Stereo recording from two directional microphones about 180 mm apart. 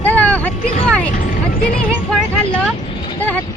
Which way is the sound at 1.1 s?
50° left (ahead or behind).